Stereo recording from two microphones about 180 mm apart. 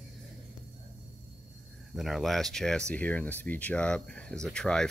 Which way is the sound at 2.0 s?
Centre (ahead or behind).